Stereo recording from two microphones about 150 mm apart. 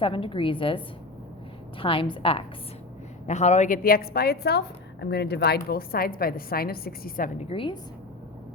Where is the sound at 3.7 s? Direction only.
75° left (ahead or behind).